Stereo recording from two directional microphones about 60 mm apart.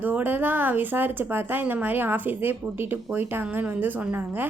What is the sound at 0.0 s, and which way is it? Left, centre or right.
A woman's voice, right.